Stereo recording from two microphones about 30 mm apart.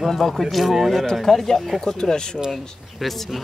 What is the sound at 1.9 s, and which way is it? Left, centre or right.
Speech, left.